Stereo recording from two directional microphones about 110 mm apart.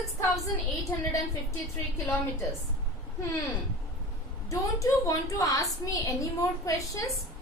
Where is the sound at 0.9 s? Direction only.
30° left (ahead or behind).